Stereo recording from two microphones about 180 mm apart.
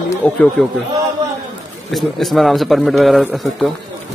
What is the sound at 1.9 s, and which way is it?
A man's voice, centre (ahead or behind).